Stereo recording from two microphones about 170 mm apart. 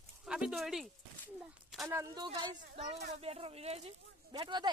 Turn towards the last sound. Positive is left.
turn(degrees=-25)  # may be behind; listen again after turning